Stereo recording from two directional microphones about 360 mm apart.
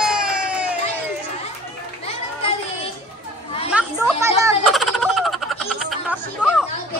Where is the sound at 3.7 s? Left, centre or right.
Centre.